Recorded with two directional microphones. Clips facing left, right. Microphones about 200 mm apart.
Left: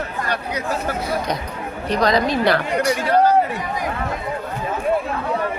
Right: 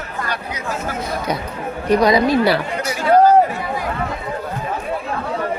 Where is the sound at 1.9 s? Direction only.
10° right (ahead or behind).